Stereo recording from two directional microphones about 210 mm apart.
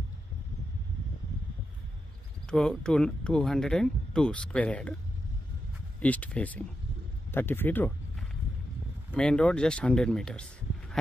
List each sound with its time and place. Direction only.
2.5 s speech: 5° left (ahead or behind)
5.9 s speech: 5° left (ahead or behind)
9.1 s speech: 5° left (ahead or behind)